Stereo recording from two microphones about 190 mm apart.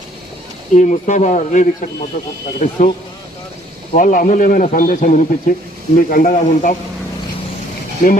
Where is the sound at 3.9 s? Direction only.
45° left (ahead or behind).